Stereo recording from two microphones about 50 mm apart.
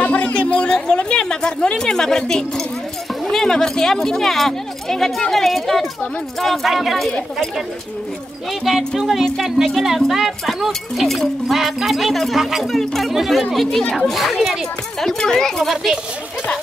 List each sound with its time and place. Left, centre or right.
0.0 s a sound: left; by 2.6 s centre
3.3 s speech: centre
8.6 s speech: centre
13.7 s speech: centre
13.9 s speech: centre
15.7 s a child's voice: centre